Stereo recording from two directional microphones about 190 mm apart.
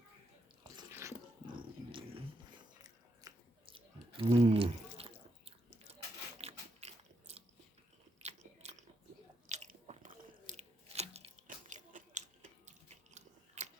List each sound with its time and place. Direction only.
0.6 s drip: 20° right (ahead or behind)
1.5 s biting: 25° right (ahead or behind)
13.6 s scissors: 40° right (ahead or behind)